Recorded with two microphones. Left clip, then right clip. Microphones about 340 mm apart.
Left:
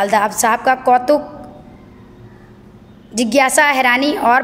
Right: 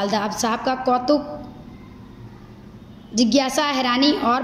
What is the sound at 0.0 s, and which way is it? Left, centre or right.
A woman's voice, left.